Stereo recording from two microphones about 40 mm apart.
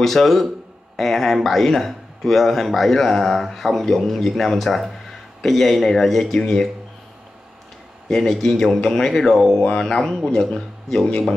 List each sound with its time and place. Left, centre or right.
0.0 s a man's voice: centre
8.1 s speech: centre
9.6 s speech: left